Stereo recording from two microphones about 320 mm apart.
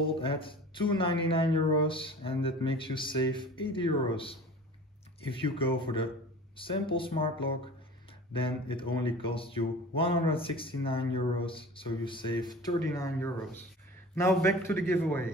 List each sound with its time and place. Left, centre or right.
0.0 s speech: centre